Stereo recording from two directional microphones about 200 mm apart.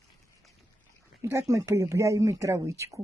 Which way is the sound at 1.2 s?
15° right (ahead or behind).